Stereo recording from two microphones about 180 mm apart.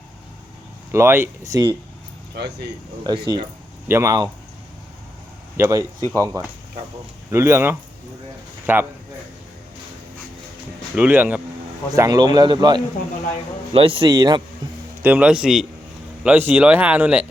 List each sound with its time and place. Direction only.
0.9 s speech: 15° right (ahead or behind)
2.3 s speech: 65° right (ahead or behind)
3.0 s speech: 25° right (ahead or behind)
5.5 s speech: 15° right (ahead or behind)
10.9 s speech: 10° right (ahead or behind)
11.9 s speech: 20° right (ahead or behind)
15.0 s speech: 10° right (ahead or behind)